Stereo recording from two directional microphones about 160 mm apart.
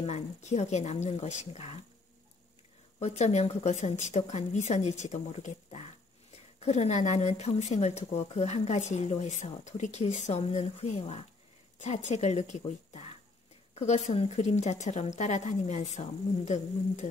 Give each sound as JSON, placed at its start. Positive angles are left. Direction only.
{"t": 0.0, "sound": "speech", "side_deg": 45}
{"t": 3.0, "sound": "speech", "side_deg": 45}